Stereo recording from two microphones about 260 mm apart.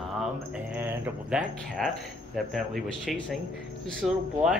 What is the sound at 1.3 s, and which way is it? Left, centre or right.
Speech, centre.